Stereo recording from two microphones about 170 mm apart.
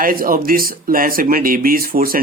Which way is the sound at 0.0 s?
60° right (ahead or behind).